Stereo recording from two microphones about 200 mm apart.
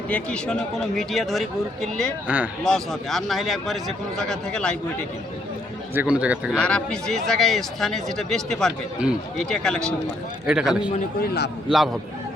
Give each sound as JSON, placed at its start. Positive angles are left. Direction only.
{"t": 0.1, "sound": "speech", "side_deg": 5}
{"t": 2.2, "sound": "speech", "side_deg": -10}
{"t": 5.9, "sound": "speech", "side_deg": -10}
{"t": 6.5, "sound": "speech", "side_deg": 5}
{"t": 11.2, "sound": "a man's voice", "side_deg": 55}